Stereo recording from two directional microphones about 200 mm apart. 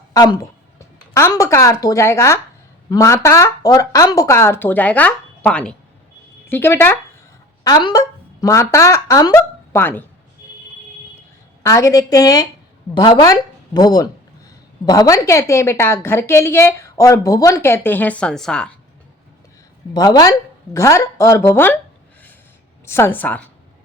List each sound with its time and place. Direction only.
0.1 s a woman's voice: 20° left (ahead or behind)
11.6 s a woman's voice: 15° left (ahead or behind)
19.9 s a woman's voice: 20° left (ahead or behind)
22.9 s a woman's voice: 10° left (ahead or behind)